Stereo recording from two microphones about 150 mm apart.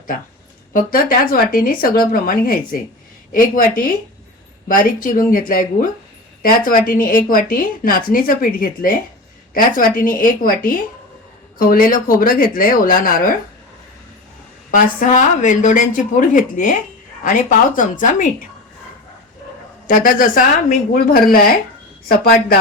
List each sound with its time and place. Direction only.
0.7 s a woman's voice: 70° left (ahead or behind)
6.7 s a woman's voice: 65° left (ahead or behind)
14.7 s a woman's voice: 60° left (ahead or behind)
17.7 s a woman's voice: 60° left (ahead or behind)
19.9 s a woman's voice: 70° left (ahead or behind)
22.2 s a woman's voice: 90° left